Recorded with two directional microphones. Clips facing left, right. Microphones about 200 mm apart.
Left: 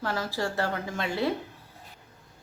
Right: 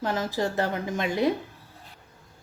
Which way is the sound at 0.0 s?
20° right (ahead or behind).